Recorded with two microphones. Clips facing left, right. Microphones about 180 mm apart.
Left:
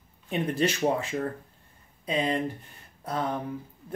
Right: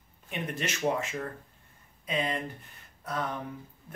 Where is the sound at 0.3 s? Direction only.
35° left (ahead or behind).